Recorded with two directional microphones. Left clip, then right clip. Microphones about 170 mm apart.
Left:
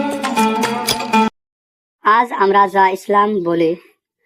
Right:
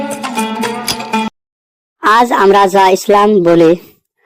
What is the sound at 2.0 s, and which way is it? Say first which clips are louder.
Speech: right 5 dB; 45° right (ahead or behind).